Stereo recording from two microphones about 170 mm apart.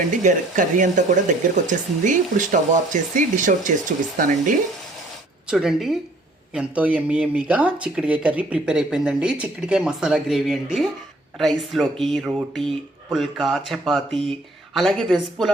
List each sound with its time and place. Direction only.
0.2 s speech: 50° right (ahead or behind)
5.5 s speech: 5° right (ahead or behind)